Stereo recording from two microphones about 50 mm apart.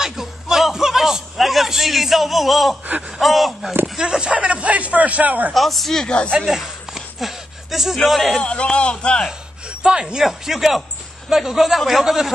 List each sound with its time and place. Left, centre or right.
0.0 s a sound: centre
3.2 s a man's voice: centre
4.2 s speech: right
5.5 s a man's voice: centre
6.0 s speech: left
6.3 s speech: centre
8.4 s speech: centre
9.7 s speech: centre
10.2 s a man's voice: centre